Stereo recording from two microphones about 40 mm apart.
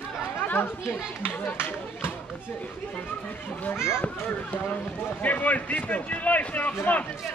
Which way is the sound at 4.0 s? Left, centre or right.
Left.